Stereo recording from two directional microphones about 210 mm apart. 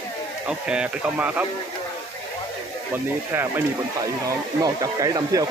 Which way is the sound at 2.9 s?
10° right (ahead or behind).